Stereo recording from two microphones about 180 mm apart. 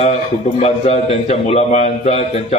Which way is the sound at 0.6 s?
35° left (ahead or behind).